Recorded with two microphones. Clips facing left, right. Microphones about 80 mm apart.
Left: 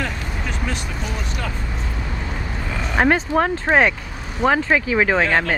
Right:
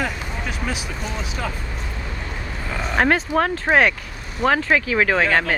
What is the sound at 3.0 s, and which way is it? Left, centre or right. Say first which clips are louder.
Speech: left 1 dB; centre.